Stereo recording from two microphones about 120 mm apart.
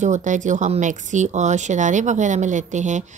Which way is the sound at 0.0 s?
90° right.